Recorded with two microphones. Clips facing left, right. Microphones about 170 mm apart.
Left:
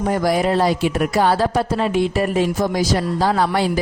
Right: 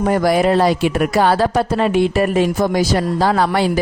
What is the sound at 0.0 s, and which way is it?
Speech, 75° right (ahead or behind).